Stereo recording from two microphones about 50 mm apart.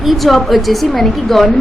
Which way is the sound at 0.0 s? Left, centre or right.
Centre.